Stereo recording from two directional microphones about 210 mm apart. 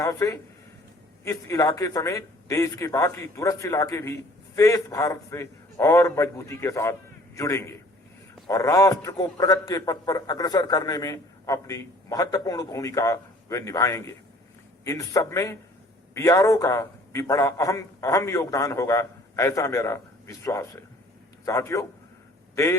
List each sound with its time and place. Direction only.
0.0 s a man's voice: 15° left (ahead or behind)